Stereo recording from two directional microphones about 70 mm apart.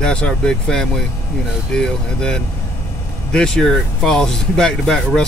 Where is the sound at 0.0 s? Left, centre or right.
Centre.